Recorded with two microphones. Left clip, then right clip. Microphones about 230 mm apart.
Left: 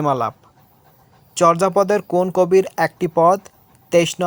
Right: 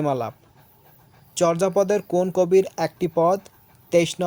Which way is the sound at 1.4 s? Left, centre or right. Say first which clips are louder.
Left 5 dB; centre.